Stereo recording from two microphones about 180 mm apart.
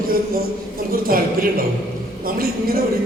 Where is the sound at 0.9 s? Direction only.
55° right (ahead or behind).